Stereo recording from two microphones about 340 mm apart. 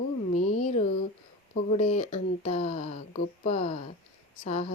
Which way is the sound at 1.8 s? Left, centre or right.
Centre.